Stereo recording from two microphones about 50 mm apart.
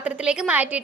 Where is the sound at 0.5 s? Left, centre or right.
Right.